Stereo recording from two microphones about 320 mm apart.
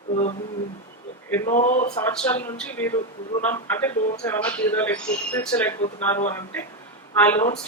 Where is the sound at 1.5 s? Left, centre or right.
Left.